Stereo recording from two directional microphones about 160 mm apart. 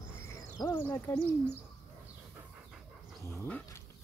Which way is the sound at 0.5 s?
20° left (ahead or behind).